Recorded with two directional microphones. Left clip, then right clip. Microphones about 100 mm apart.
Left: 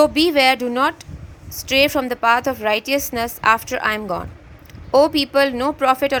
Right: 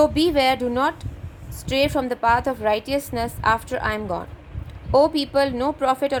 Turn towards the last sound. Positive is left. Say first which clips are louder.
# left 4 dB
turn(degrees=35)  # may be behind; listen again after turning